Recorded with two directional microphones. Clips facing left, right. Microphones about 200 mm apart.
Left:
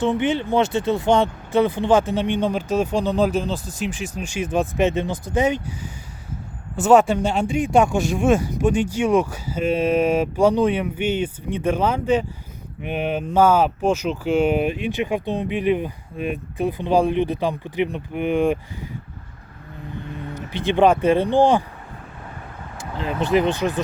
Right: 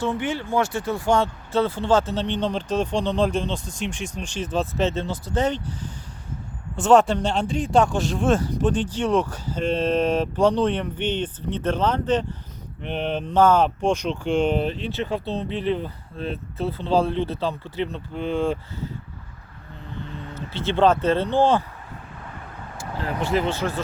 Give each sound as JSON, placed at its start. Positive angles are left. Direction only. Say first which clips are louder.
{"t": 0.0, "sound": "speech", "louder": "left 5 dB", "side_deg": 20}
{"t": 20.3, "sound": "speech", "louder": "left 3 dB", "side_deg": 15}
{"t": 22.8, "sound": "speech", "louder": "left 2 dB", "side_deg": 20}